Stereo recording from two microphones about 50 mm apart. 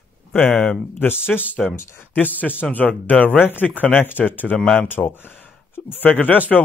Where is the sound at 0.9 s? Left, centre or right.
Left.